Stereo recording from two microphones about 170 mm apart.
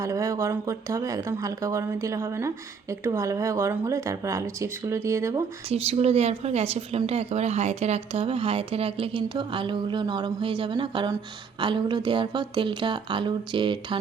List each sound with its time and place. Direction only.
0.0 s speech: 20° right (ahead or behind)
5.6 s speech: 35° right (ahead or behind)